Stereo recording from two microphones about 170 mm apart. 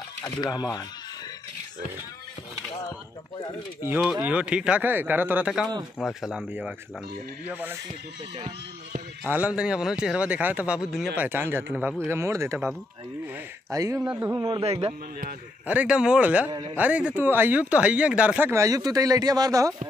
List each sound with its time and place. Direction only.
0.2 s speech: 20° left (ahead or behind)
4.0 s speech: 5° right (ahead or behind)
8.4 s speech: 40° right (ahead or behind)
9.3 s speech: 10° right (ahead or behind)
14.3 s speech: 25° right (ahead or behind)
14.6 s speech: 35° right (ahead or behind)
15.6 s speech: 10° right (ahead or behind)